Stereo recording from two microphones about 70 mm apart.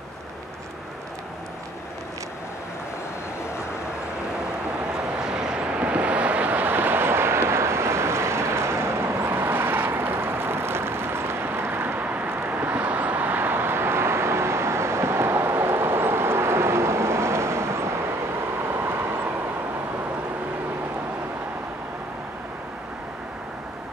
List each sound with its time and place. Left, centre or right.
5.2 s vehicle: centre; by 19.3 s right